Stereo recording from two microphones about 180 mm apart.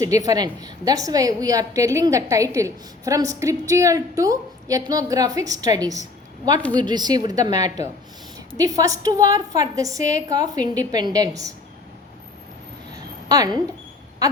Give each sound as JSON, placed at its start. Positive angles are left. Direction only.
{"t": 0.0, "sound": "a woman's voice", "side_deg": -20}
{"t": 13.2, "sound": "a woman's voice", "side_deg": -20}